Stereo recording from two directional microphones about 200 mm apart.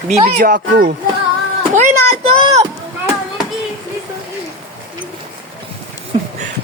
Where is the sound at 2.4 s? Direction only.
25° right (ahead or behind).